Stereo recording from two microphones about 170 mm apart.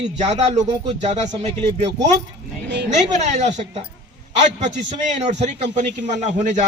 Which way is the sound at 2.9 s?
45° right (ahead or behind).